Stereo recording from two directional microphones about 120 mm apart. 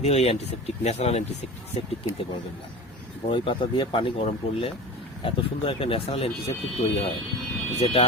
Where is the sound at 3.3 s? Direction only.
45° left (ahead or behind).